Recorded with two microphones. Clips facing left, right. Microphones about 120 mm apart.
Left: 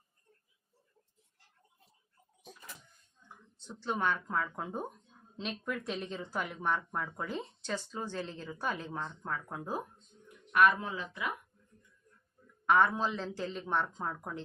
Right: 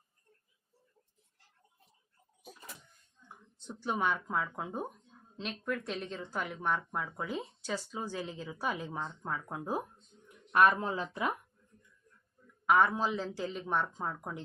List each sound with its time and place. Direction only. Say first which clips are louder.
3.8 s speech: even; 10° right (ahead or behind)
10.5 s speech: right 1 dB; 35° right (ahead or behind)
12.6 s speech: even; 5° right (ahead or behind)